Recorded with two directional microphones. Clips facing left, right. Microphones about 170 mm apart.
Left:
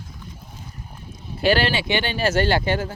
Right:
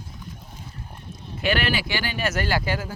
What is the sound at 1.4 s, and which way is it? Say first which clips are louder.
Speech: left 4 dB; 35° left (ahead or behind).